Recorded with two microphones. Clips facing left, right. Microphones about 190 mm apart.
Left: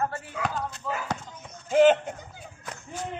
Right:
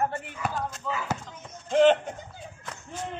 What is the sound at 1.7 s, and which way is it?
Speech, 5° left (ahead or behind).